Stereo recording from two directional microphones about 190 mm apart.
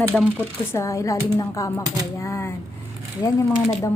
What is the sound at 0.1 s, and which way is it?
Speech, 5° left (ahead or behind).